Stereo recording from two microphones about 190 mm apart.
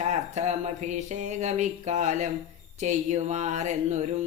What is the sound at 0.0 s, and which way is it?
Speech, 35° right (ahead or behind).